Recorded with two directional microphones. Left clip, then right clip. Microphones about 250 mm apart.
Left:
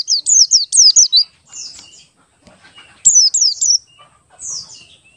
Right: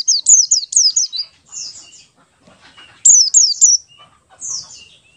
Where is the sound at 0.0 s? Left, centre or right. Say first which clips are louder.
Even; centre.